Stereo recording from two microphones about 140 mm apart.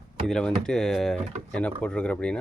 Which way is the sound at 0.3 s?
5° left (ahead or behind).